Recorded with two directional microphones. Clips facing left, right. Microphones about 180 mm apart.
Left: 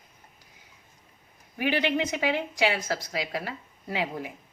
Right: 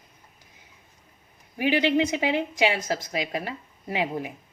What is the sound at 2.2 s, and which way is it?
Speech, 15° right (ahead or behind).